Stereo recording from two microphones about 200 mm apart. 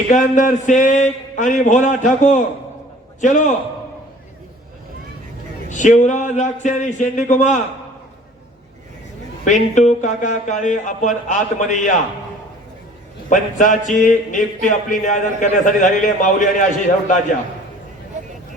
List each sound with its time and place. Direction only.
0.1 s speech: 40° left (ahead or behind)
5.6 s speech: 40° left (ahead or behind)
9.4 s speech: 35° left (ahead or behind)
13.3 s speech: 40° left (ahead or behind)